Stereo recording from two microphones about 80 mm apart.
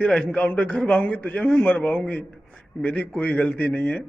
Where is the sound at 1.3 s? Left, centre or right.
Centre.